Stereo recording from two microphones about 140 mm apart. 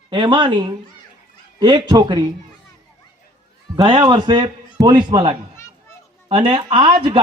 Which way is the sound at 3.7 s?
35° right (ahead or behind).